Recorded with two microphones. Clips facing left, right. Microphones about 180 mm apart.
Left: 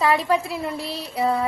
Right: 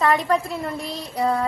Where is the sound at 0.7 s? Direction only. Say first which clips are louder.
Even; 30° left (ahead or behind).